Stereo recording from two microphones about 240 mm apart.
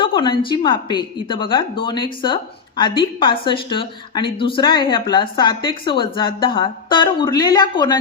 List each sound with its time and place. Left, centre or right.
0.0 s speech: centre